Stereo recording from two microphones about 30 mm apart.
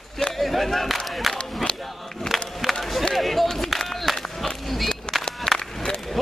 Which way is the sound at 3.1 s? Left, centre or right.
Centre.